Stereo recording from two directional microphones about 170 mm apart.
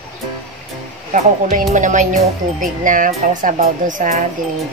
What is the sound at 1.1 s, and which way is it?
Speech, 45° right (ahead or behind).